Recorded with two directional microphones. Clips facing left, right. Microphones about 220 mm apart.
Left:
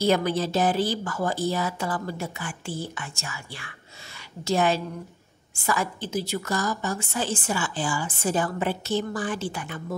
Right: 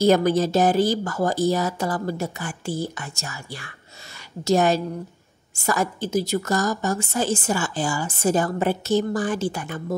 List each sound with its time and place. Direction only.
0.0 s a woman's voice: 45° right (ahead or behind)